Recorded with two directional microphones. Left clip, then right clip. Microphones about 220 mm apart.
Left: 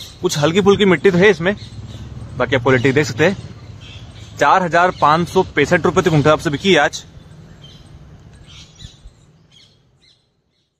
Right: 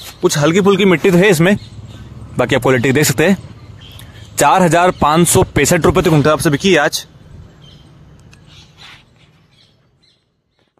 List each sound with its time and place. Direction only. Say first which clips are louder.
0.2 s speech: right 3 dB; 15° right (ahead or behind)
0.7 s speech: right 2 dB; 30° right (ahead or behind); by 3.3 s 50° right (ahead or behind)
4.4 s speech: right 2 dB; 50° right (ahead or behind)
6.1 s speech: right 2 dB; 20° right (ahead or behind)